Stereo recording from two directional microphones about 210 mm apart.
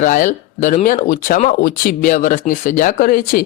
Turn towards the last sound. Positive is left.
turn(degrees=45)  # may be behind; listen again after turning